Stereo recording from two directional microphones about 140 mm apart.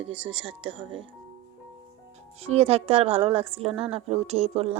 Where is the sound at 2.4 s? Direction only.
45° right (ahead or behind).